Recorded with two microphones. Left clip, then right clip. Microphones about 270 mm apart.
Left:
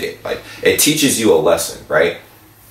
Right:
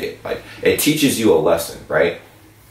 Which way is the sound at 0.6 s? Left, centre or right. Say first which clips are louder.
Left 2 dB; centre.